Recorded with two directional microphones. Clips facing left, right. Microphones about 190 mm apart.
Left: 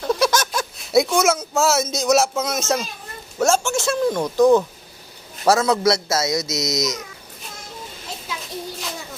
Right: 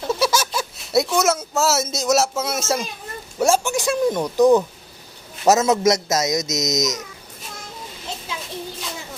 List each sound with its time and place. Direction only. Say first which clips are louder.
0.1 s a man's voice: left 1 dB; 5° right (ahead or behind)